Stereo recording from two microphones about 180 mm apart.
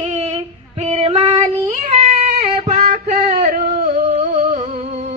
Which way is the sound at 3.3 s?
45° right (ahead or behind).